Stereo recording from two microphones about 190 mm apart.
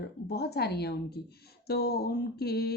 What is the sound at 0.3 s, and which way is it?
Speech, 60° left (ahead or behind).